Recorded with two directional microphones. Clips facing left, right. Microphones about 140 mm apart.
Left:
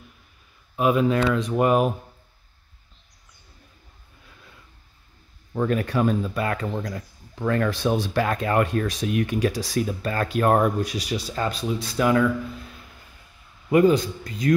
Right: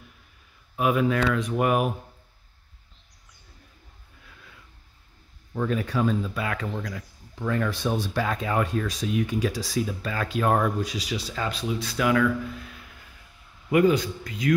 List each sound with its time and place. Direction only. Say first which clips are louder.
0.7 s speech: left 3 dB; 25° left (ahead or behind)
5.7 s a man's voice: left 2 dB; 60° left (ahead or behind); by 7.1 s 40° left (ahead or behind)
7.3 s a man's voice: left 4 dB; 65° left (ahead or behind); by 14.5 s 40° left (ahead or behind)